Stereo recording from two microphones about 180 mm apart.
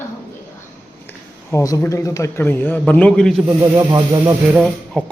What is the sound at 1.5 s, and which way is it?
Speech, 20° left (ahead or behind).